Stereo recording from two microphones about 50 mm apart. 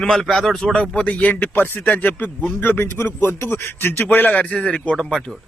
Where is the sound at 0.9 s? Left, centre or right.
Left.